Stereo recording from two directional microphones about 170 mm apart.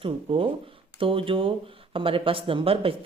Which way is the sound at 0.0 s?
30° right (ahead or behind).